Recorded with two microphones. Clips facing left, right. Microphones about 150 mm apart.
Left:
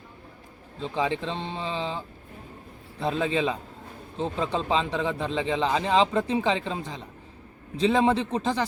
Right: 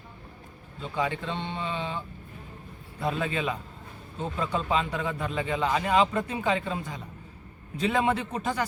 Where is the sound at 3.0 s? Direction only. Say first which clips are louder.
Left 3 dB; 25° left (ahead or behind).